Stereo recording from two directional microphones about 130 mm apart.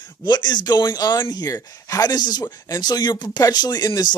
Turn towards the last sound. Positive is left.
turn(degrees=30)  # may be behind; listen again after turning